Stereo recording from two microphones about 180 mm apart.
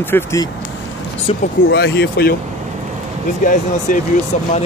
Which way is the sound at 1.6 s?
70° left (ahead or behind).